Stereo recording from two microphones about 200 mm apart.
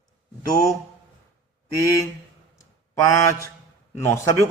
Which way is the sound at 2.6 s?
15° left (ahead or behind).